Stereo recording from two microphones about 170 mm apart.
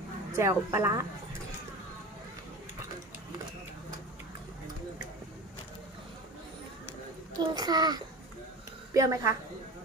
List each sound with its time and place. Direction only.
0.4 s a woman's voice: 15° right (ahead or behind)
7.3 s a child's voice: 25° right (ahead or behind)